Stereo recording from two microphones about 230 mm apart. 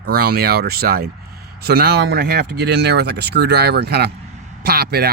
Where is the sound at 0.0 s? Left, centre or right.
Right.